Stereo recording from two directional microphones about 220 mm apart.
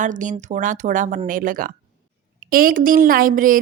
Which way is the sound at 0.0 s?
35° right (ahead or behind).